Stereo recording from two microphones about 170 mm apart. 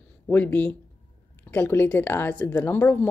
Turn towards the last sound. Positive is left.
turn(degrees=10)  # may be behind; listen again after turning